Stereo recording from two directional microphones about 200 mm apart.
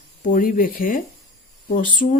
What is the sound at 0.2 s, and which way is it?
Speech, 40° left (ahead or behind).